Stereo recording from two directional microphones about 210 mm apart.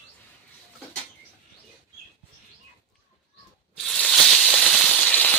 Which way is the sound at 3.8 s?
5° left (ahead or behind).